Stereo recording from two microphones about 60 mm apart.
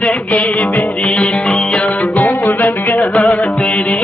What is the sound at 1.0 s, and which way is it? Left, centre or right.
Music, centre.